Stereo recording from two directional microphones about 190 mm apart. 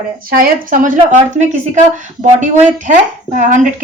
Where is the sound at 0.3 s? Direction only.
50° right (ahead or behind).